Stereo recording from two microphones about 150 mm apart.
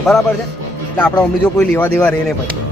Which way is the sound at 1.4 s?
10° left (ahead or behind).